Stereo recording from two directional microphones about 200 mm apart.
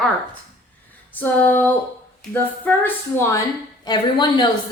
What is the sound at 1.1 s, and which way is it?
A woman's voice, 10° left (ahead or behind).